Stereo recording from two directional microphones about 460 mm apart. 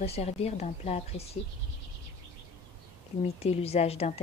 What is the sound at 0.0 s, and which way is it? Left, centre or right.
A woman's voice, centre.